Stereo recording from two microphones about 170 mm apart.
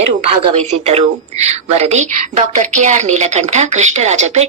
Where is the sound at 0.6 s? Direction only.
35° right (ahead or behind).